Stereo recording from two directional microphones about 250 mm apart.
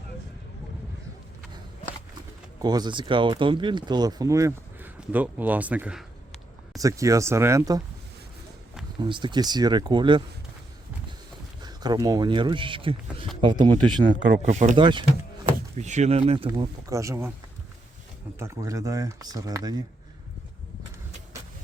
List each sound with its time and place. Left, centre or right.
2.6 s speech: centre
9.0 s speech: centre
11.6 s speech: centre
14.2 s speech: right
14.4 s speech: right; by 17.3 s centre
18.3 s speech: centre